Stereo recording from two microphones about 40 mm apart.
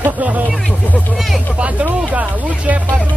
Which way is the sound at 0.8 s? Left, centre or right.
Left.